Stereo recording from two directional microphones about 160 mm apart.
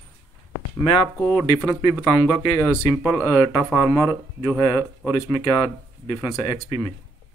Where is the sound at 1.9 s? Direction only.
15° left (ahead or behind).